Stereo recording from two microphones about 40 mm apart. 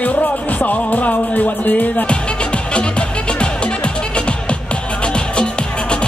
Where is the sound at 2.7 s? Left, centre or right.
Left.